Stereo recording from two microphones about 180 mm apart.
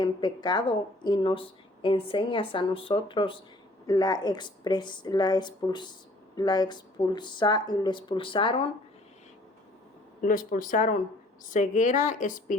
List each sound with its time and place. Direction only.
0.0 s speech: 25° left (ahead or behind)
10.2 s a woman's voice: 50° left (ahead or behind)